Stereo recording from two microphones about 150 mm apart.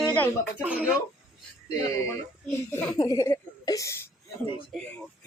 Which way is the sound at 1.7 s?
25° left (ahead or behind).